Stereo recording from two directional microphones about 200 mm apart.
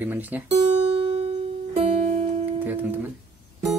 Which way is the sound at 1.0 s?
30° right (ahead or behind).